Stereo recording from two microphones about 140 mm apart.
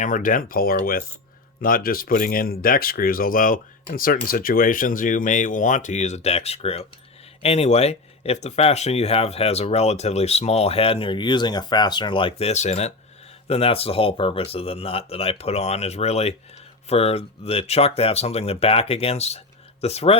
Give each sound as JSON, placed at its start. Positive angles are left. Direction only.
{"t": 0.0, "sound": "speech", "side_deg": 70}